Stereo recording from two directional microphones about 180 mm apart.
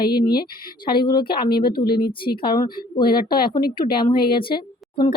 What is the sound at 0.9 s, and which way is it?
Speech, 25° left (ahead or behind).